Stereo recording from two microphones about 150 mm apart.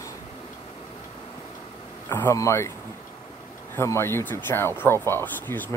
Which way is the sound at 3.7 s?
15° left (ahead or behind).